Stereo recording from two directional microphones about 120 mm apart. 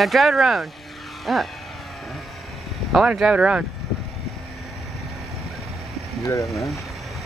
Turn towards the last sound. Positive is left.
turn(degrees=25)  # may be behind; listen again after turning